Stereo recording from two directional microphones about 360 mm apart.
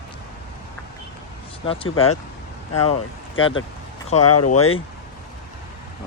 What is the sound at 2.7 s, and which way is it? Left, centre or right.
Speech, left.